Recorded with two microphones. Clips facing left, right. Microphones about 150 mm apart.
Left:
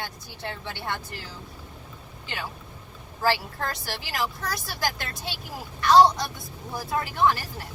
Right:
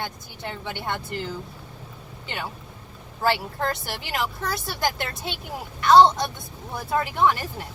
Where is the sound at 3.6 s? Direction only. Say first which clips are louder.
Right 4 dB; 25° right (ahead or behind).